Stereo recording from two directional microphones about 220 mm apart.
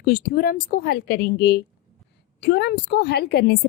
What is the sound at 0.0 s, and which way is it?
A woman's voice, 45° left (ahead or behind).